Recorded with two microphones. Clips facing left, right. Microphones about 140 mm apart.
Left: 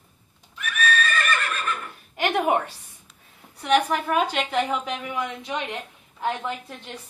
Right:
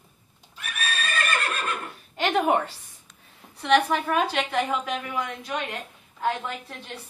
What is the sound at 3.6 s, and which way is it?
A woman's voice, 10° left (ahead or behind).